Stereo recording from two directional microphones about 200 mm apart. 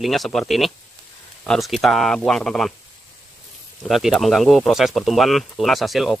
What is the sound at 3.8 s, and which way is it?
Speech, centre (ahead or behind).